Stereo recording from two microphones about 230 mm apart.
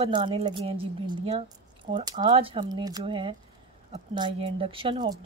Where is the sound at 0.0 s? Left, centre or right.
Right.